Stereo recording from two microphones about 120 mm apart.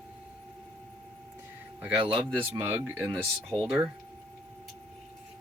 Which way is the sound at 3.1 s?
5° left (ahead or behind).